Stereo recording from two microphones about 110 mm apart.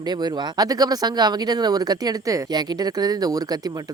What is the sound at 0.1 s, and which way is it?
Speech, 40° right (ahead or behind).